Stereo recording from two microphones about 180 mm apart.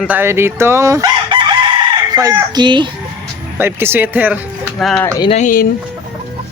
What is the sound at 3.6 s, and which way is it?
Speech, 10° right (ahead or behind).